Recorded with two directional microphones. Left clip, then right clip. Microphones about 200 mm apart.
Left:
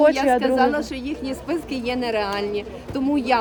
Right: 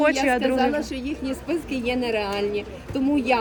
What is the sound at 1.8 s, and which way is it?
Speech, 45° left (ahead or behind).